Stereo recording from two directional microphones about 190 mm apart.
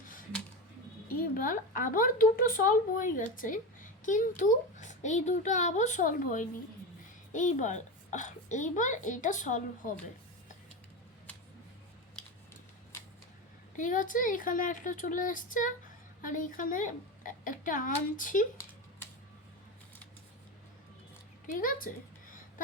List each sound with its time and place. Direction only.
1.0 s a child's voice: 50° left (ahead or behind)
13.7 s speech: 45° left (ahead or behind)
21.6 s speech: 45° left (ahead or behind)